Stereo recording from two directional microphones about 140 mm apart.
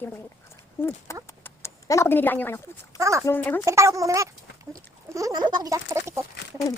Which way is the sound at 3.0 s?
20° right (ahead or behind).